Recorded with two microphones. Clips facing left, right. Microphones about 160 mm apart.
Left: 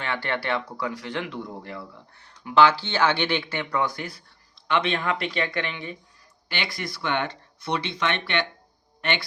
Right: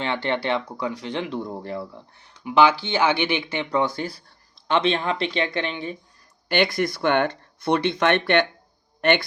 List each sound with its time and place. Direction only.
0.0 s speech: 20° right (ahead or behind)
1.4 s speech: 35° right (ahead or behind)
2.1 s speech: 15° right (ahead or behind)
6.5 s speech: 50° right (ahead or behind)